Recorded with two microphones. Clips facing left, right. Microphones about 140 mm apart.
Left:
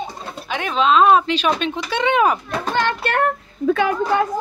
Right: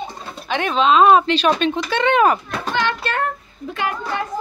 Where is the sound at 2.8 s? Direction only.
55° left (ahead or behind).